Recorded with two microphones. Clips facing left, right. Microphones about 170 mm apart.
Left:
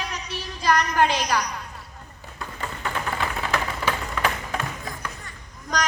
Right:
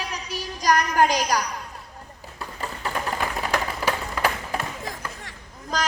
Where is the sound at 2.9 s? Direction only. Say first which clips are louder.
Right 1 dB; 10° right (ahead or behind).